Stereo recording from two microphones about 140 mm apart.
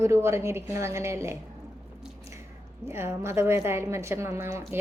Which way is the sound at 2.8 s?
20° right (ahead or behind).